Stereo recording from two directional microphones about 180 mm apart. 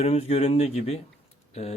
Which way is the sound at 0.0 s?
35° left (ahead or behind).